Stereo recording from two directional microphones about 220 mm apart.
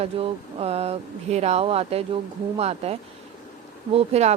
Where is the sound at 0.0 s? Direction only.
25° right (ahead or behind).